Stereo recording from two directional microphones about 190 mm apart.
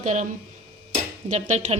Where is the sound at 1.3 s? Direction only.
35° right (ahead or behind).